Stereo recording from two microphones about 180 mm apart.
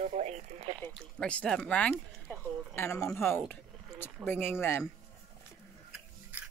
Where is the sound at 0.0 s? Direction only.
40° right (ahead or behind).